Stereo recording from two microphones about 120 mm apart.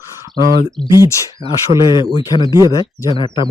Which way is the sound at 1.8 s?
40° left (ahead or behind).